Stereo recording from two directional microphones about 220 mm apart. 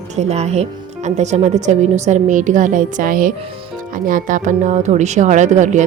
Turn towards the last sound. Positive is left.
turn(degrees=-35)  # may be behind; listen again after turning